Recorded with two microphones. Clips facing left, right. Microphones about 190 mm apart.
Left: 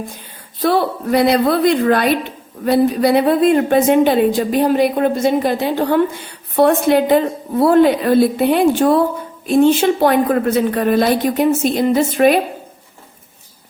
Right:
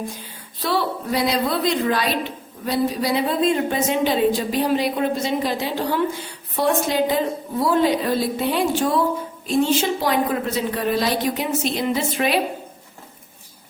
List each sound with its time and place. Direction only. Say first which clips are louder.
0.6 s a woman's voice: left 7 dB; 55° left (ahead or behind)